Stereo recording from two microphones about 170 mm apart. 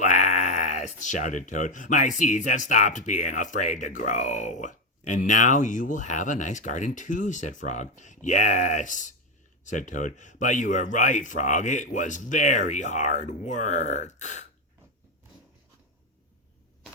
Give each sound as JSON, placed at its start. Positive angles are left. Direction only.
{"t": 0.0, "sound": "speech", "side_deg": 45}